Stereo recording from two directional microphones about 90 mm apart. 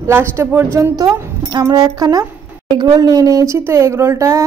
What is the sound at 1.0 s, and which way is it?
A woman's voice, 50° right (ahead or behind).